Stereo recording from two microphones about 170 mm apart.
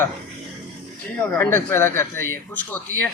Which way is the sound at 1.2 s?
15° left (ahead or behind).